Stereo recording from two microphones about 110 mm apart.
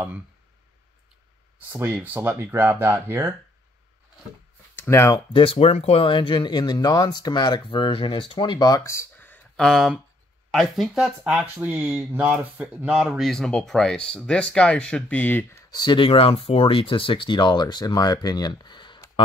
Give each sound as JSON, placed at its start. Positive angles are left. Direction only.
{"t": 1.7, "sound": "speech", "side_deg": -15}
{"t": 4.7, "sound": "speech", "side_deg": 25}
{"t": 5.1, "sound": "speech", "side_deg": 55}
{"t": 8.6, "sound": "a sound", "side_deg": 30}
{"t": 9.6, "sound": "speech", "side_deg": 0}
{"t": 11.2, "sound": "speech", "side_deg": -15}
{"t": 13.2, "sound": "speech", "side_deg": 5}
{"t": 15.7, "sound": "speech", "side_deg": 45}